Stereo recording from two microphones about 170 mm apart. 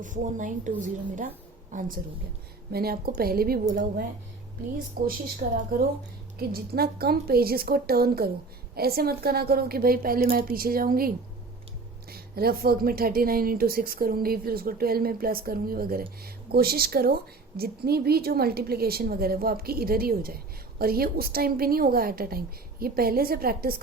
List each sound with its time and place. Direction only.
0.0 s a woman's voice: 50° right (ahead or behind)
2.7 s a woman's voice: 65° right (ahead or behind)
5.0 s a woman's voice: 55° right (ahead or behind)
6.5 s a woman's voice: 65° right (ahead or behind)